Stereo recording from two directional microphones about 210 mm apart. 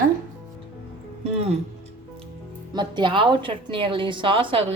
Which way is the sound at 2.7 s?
20° right (ahead or behind).